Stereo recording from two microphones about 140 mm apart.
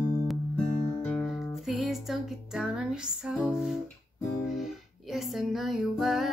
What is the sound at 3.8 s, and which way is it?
Guitar, 15° left (ahead or behind).